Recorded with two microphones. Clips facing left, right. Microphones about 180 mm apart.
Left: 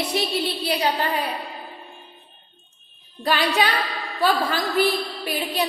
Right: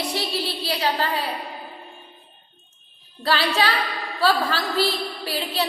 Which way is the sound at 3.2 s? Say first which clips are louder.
Left 1 dB; 15° left (ahead or behind).